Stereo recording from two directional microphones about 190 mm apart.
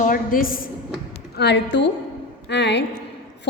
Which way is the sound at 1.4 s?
60° left (ahead or behind).